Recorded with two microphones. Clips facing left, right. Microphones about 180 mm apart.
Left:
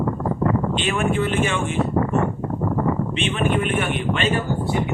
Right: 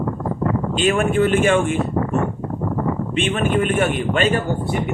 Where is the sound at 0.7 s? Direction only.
45° right (ahead or behind).